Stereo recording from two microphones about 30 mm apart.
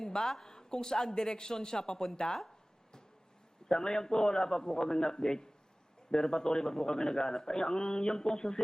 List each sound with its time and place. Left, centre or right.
0.0 s a sound: left
0.4 s speech: left
3.7 s speech: left